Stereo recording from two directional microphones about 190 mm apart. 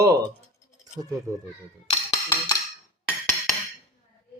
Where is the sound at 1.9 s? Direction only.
25° left (ahead or behind).